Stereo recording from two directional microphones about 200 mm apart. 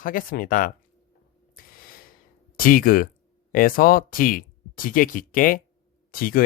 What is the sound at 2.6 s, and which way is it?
Speech, 45° left (ahead or behind).